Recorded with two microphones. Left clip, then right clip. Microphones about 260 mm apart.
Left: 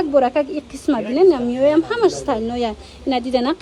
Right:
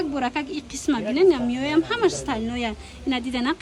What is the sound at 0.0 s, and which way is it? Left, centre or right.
A woman's voice, centre.